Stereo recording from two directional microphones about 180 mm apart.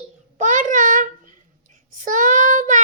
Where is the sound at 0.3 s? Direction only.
45° right (ahead or behind).